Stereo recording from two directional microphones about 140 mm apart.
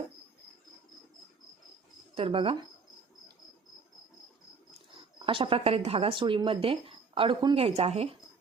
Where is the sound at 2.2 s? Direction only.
40° right (ahead or behind).